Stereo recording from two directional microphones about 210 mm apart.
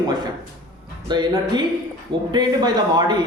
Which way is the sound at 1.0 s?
20° right (ahead or behind).